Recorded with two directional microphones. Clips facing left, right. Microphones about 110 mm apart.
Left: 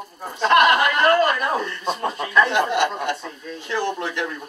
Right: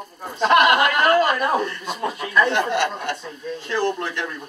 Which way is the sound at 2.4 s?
15° left (ahead or behind).